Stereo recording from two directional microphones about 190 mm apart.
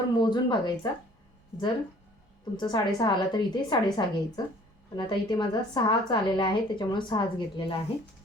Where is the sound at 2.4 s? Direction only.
25° left (ahead or behind).